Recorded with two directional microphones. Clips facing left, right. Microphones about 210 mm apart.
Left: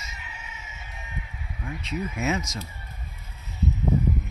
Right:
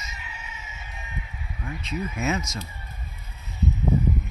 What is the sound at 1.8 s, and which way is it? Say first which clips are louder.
Speech: even; 15° left (ahead or behind).